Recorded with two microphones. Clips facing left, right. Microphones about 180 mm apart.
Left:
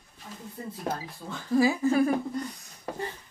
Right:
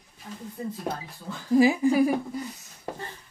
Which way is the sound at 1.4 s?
15° right (ahead or behind).